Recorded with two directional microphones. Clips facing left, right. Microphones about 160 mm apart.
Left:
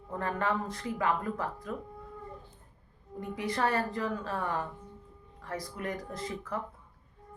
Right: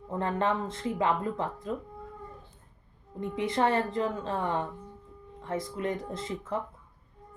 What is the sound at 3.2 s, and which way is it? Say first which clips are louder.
A woman's voice: right 4 dB; 25° right (ahead or behind).